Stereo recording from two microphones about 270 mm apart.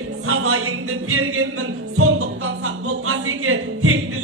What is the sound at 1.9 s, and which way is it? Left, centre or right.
Music, right.